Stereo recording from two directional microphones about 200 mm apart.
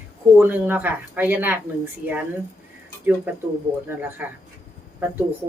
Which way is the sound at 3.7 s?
25° right (ahead or behind).